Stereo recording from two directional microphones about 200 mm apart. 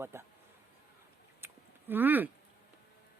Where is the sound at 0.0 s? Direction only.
10° right (ahead or behind).